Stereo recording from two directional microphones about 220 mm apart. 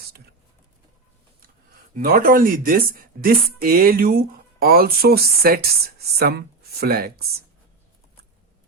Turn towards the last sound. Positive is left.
turn(degrees=-45)  # may be behind; listen again after turning